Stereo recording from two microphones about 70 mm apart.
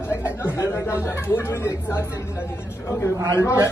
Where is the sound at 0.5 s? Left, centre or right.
Left.